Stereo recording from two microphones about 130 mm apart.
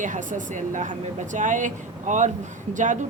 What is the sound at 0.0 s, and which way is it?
Speech, 80° right.